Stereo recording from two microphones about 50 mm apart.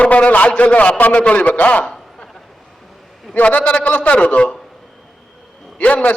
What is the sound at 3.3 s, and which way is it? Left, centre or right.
A man's voice, left.